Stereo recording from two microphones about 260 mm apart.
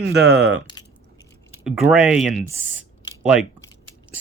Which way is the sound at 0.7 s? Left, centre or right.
Centre.